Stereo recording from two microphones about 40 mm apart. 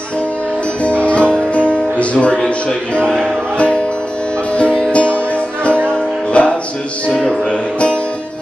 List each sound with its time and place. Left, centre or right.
1.0 s music: left
4.6 s music: left